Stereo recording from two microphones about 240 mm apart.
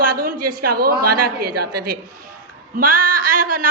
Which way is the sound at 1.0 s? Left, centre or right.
Right.